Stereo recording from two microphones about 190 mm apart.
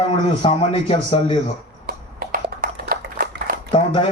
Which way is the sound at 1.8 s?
55° right (ahead or behind).